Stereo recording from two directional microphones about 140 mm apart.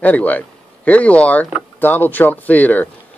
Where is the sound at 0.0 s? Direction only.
10° left (ahead or behind).